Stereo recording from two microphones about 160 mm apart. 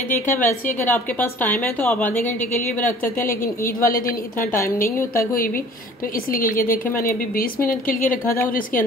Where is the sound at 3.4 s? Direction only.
60° left (ahead or behind).